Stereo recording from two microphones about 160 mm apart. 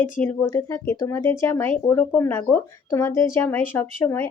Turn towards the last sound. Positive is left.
turn(degrees=15)  # may be behind; listen again after turning